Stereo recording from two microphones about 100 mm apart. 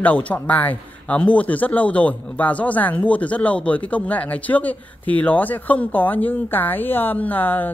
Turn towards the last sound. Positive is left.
turn(degrees=20)  # may be behind; listen again after turning